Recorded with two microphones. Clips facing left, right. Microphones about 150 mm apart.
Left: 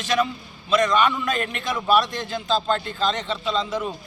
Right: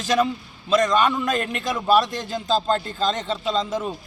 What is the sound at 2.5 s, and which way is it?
Speech, 35° right (ahead or behind).